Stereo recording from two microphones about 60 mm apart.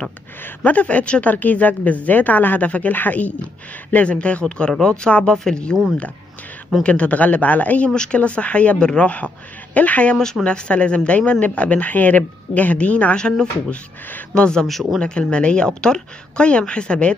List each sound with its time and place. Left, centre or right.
0.7 s a woman's voice: left
6.8 s a woman's voice: left
7.9 s a woman's voice: centre
15.0 s a woman's voice: centre